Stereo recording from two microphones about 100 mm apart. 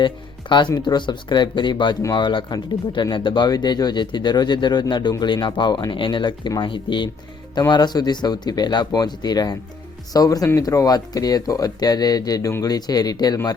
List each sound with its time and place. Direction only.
0.0 s music: 50° left (ahead or behind)
0.8 s speech: 50° left (ahead or behind)